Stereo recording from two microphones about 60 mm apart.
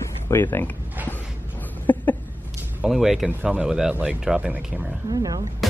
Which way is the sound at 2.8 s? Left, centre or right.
Centre.